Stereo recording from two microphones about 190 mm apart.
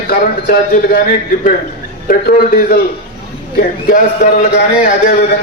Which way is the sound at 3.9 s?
45° left (ahead or behind).